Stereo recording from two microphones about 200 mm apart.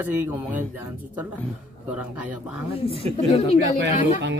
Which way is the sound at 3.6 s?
60° right (ahead or behind).